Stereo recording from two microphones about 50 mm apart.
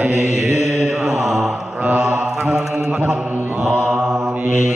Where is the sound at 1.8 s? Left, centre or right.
Right.